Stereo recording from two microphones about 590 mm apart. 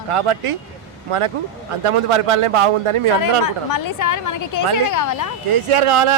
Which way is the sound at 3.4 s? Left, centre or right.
Left.